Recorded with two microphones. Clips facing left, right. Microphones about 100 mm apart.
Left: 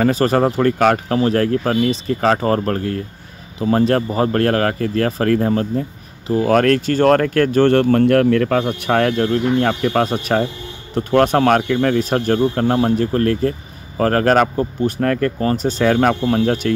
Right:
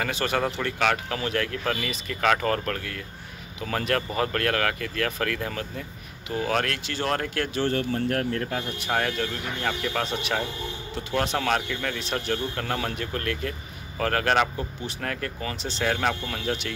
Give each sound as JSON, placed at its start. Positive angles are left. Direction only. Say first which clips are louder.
{"t": 0.0, "sound": "speech", "louder": "left 11 dB", "side_deg": 40}